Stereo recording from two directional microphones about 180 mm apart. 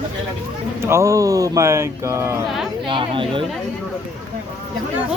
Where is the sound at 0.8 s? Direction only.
15° right (ahead or behind).